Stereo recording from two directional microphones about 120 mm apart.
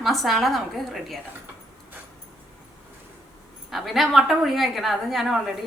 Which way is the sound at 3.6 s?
Centre (ahead or behind).